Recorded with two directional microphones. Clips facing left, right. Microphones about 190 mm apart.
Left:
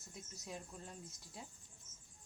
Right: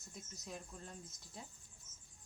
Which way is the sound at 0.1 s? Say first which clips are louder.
Even; 5° left (ahead or behind).